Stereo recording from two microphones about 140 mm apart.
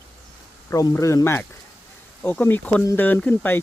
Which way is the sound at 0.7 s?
20° left (ahead or behind).